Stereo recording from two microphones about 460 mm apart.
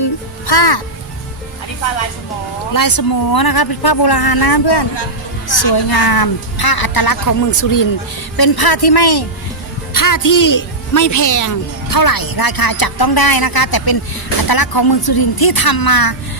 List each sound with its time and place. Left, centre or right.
0.0 s music: left
2.7 s a woman's voice: left
8.4 s a woman's voice: left
9.9 s a woman's voice: left